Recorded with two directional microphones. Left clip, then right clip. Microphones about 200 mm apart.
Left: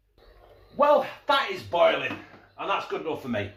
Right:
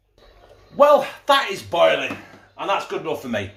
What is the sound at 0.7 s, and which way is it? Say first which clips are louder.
Speech: right 6 dB; 50° right (ahead or behind).